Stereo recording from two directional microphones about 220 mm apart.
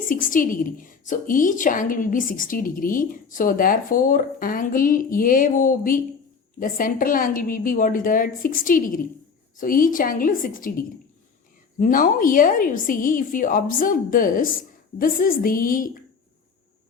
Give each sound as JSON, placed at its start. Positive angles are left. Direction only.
{"t": 0.1, "sound": "a woman's voice", "side_deg": 40}